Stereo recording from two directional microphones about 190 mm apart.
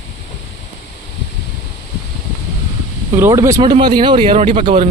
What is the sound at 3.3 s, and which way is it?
Speech, 15° right (ahead or behind).